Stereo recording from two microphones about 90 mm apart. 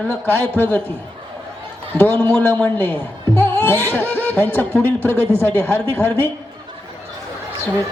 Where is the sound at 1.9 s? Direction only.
20° left (ahead or behind).